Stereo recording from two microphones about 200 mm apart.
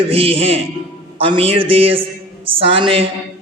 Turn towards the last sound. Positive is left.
turn(degrees=-25)  # may be behind; listen again after turning